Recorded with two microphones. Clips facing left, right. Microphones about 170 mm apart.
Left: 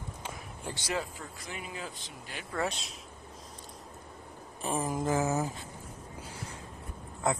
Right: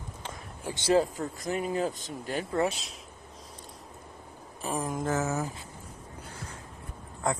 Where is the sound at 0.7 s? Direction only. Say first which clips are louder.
Right 11 dB; 30° right (ahead or behind).